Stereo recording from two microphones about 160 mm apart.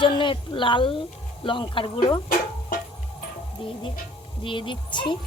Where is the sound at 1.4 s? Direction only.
30° left (ahead or behind).